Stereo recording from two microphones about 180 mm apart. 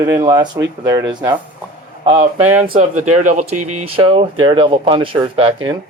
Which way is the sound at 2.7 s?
40° right (ahead or behind).